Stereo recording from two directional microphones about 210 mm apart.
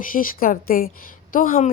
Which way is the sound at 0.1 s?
40° left (ahead or behind).